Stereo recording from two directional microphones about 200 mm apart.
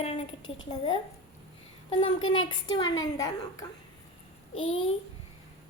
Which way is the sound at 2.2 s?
85° left.